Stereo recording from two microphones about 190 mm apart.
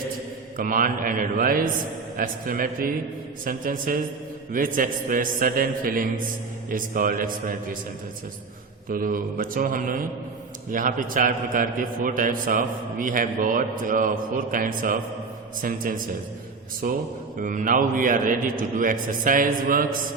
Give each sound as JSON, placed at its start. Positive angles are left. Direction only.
{"t": 0.5, "sound": "a man's voice", "side_deg": -45}
{"t": 8.9, "sound": "a man's voice", "side_deg": -45}